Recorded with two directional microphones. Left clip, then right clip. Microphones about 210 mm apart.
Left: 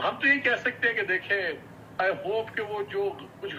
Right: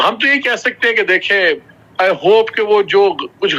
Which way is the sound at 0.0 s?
60° right (ahead or behind).